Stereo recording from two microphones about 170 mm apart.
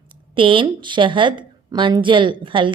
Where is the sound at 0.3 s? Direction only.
30° right (ahead or behind).